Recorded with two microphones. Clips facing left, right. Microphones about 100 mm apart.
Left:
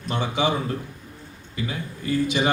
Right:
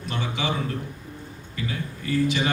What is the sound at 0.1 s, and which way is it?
Speech, 20° left (ahead or behind).